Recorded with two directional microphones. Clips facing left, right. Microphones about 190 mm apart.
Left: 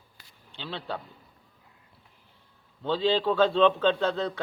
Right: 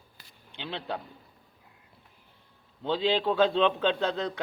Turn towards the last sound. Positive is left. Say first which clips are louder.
# left 2 dB
turn(degrees=-15)  # may be behind; listen again after turning